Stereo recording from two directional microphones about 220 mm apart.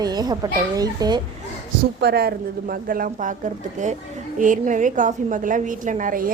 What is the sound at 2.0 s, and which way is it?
A woman's voice, 45° right (ahead or behind).